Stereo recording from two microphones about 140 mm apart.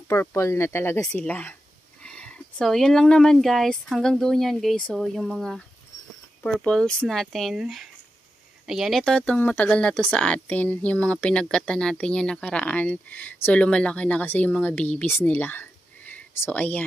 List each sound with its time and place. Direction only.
0.1 s speech: 20° left (ahead or behind)